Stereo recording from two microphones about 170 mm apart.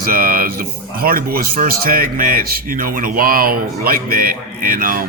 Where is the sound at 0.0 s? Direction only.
60° right (ahead or behind).